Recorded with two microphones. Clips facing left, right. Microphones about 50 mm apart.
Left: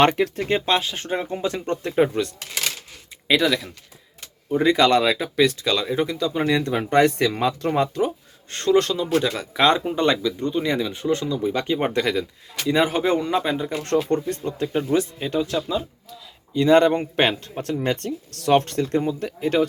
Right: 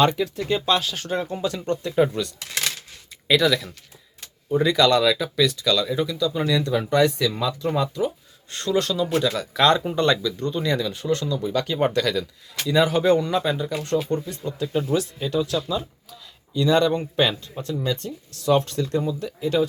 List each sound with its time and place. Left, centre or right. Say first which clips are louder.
0.0 s speech: left 2 dB; left
3.2 s speech: even; left
13.7 s speech: left 2 dB; left
14.7 s speech: left 1 dB; left
16.6 s speech: left 4 dB; left